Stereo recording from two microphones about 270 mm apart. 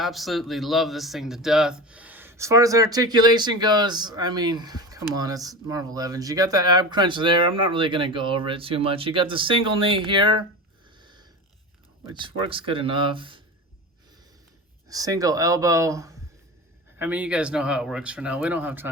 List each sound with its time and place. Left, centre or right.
0.0 s speech: centre
11.0 s a sound: centre
12.2 s speech: centre
14.8 s speech: centre